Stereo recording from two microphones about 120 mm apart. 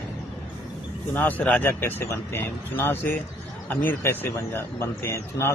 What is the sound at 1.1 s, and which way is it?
Speech, 15° left (ahead or behind).